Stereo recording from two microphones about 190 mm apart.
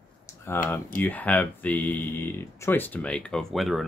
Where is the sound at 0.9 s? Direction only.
10° left (ahead or behind).